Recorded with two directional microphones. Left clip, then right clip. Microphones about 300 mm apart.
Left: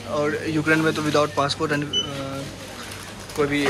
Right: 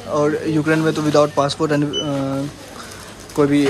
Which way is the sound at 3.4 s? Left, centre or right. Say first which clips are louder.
Right 6 dB; centre.